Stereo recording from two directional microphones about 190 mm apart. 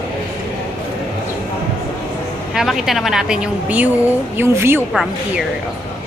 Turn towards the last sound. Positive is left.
turn(degrees=-10)  # may be behind; listen again after turning